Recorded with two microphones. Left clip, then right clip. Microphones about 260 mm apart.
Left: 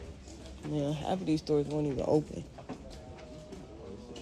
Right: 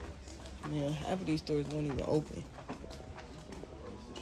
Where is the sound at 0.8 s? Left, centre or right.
Centre.